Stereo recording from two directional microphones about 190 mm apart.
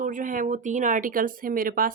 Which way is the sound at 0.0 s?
45° right (ahead or behind).